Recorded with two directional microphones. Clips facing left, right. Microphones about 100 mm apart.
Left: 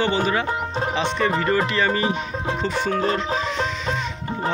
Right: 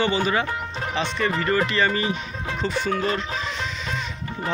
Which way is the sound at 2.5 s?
30° left (ahead or behind).